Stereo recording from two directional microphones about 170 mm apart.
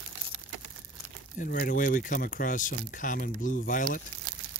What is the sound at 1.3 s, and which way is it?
Speech, 55° left (ahead or behind).